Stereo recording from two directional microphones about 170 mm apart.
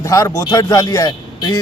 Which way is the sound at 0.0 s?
20° left (ahead or behind).